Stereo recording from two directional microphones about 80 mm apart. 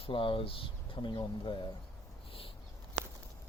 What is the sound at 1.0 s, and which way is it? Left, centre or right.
Speech, left.